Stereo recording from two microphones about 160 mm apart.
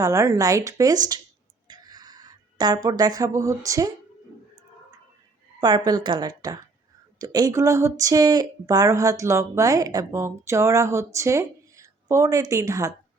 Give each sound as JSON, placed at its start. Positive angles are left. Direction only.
{"t": 0.0, "sound": "speech", "side_deg": -20}
{"t": 1.6, "sound": "a sound", "side_deg": -25}
{"t": 5.5, "sound": "speech", "side_deg": -25}